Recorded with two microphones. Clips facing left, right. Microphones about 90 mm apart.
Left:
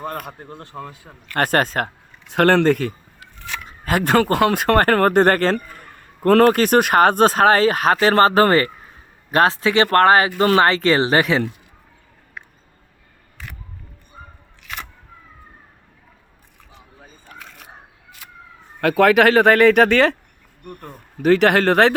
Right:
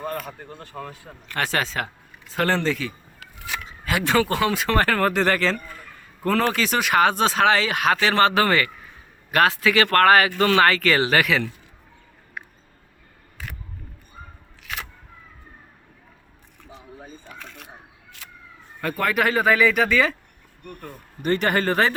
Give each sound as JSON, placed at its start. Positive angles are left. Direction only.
{"t": 0.2, "sound": "speech", "side_deg": 50}
{"t": 0.6, "sound": "speech", "side_deg": 25}
{"t": 1.3, "sound": "speech", "side_deg": 50}
{"t": 2.3, "sound": "speech", "side_deg": 60}
{"t": 3.3, "sound": "a sound", "side_deg": -10}
{"t": 3.7, "sound": "speech", "side_deg": 45}
{"t": 17.3, "sound": "single-lens reflex camera", "side_deg": 5}
{"t": 18.8, "sound": "speech", "side_deg": 85}
{"t": 21.2, "sound": "speech", "side_deg": 90}